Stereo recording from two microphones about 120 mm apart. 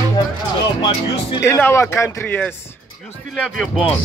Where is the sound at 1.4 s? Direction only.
20° left (ahead or behind).